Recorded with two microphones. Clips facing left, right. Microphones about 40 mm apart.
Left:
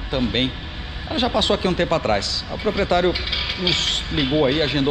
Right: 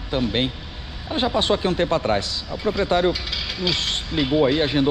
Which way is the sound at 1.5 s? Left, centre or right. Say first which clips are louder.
Left 1 dB; left.